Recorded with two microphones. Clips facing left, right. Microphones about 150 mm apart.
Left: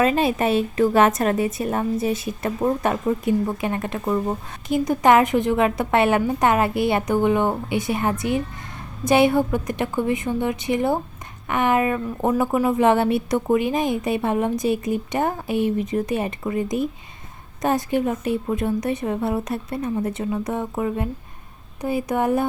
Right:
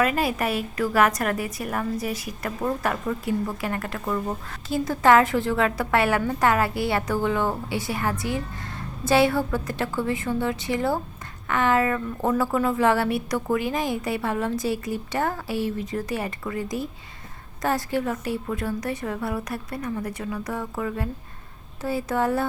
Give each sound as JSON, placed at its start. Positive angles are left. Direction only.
{"t": 0.0, "sound": "a woman's voice", "side_deg": 25}